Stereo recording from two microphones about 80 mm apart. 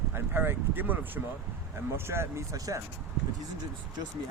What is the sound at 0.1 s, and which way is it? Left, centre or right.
Speech, right.